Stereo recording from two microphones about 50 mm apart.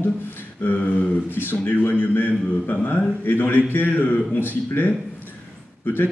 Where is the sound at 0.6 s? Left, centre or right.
Left.